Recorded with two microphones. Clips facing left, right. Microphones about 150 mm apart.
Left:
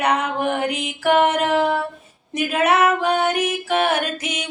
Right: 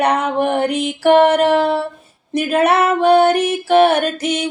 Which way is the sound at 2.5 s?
35° right (ahead or behind).